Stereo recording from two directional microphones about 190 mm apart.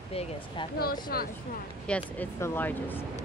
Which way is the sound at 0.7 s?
50° left (ahead or behind).